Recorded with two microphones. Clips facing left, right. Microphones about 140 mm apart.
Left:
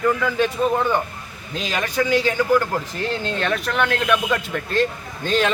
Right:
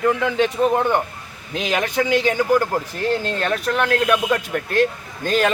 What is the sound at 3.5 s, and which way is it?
Speech, 35° right (ahead or behind).